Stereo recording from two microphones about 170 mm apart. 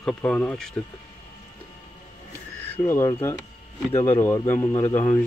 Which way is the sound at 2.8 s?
15° left (ahead or behind).